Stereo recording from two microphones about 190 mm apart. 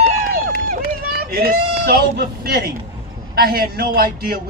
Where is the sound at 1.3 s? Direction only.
50° right (ahead or behind).